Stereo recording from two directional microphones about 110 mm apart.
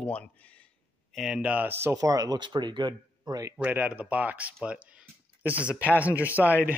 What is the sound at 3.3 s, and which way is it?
Speech, 30° right (ahead or behind).